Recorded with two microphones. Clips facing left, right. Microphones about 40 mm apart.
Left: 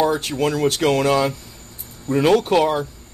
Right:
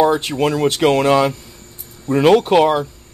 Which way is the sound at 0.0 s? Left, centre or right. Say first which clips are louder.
Right 4 dB; right.